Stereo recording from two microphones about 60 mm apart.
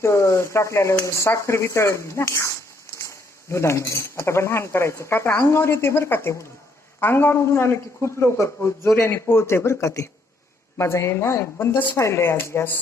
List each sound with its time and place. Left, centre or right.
0.0 s speech: left
11.9 s speech: left